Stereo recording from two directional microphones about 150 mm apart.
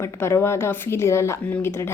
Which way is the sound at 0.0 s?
15° left (ahead or behind).